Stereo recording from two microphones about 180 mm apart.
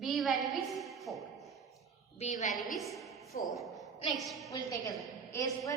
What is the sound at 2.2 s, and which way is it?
Speech, 40° left (ahead or behind).